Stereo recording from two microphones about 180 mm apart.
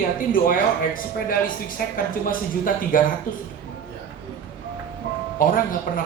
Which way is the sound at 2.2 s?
50° left (ahead or behind).